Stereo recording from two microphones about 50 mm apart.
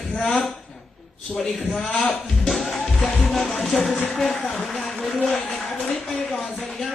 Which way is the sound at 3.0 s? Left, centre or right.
Centre.